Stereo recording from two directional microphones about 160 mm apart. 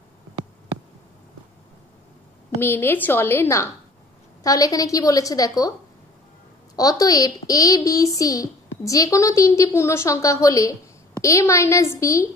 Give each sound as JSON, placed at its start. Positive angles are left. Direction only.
{"t": 2.6, "sound": "a woman's voice", "side_deg": 15}